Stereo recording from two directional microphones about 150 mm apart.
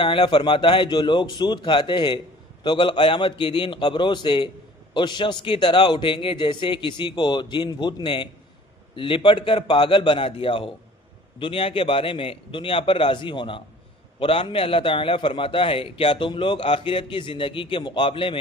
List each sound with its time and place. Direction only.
0.0 s a man's voice: 35° left (ahead or behind)